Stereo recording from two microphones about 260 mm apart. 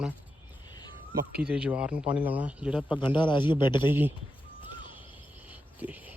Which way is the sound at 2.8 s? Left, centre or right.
Centre.